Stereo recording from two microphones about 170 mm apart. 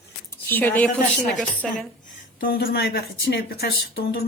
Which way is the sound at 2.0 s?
60° left (ahead or behind).